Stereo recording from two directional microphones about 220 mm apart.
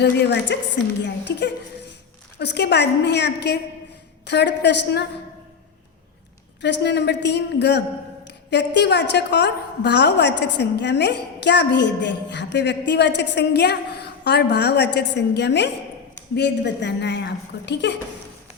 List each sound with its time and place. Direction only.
0.0 s a woman's voice: 50° left (ahead or behind)
6.6 s a woman's voice: 50° left (ahead or behind)